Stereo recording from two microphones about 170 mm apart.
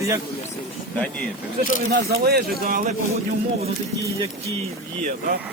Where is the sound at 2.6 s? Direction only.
50° right (ahead or behind).